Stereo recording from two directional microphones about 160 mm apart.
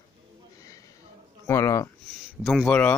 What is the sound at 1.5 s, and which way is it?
Speech, 20° left (ahead or behind).